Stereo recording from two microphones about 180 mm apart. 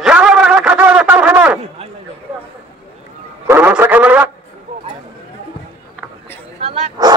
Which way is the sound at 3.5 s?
10° right (ahead or behind).